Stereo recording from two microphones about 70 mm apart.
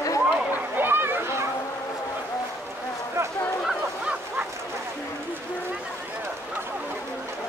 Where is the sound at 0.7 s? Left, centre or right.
Right.